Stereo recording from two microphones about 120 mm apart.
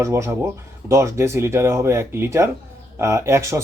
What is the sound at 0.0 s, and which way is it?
Speech, 25° right (ahead or behind).